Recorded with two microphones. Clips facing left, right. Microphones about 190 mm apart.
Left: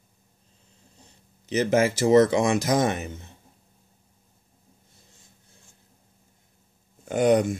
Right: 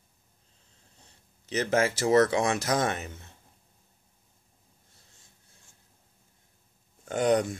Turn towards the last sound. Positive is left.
turn(degrees=10)  # may be behind; listen again after turning